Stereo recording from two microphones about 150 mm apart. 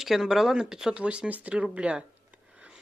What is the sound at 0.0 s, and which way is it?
Speech, centre (ahead or behind).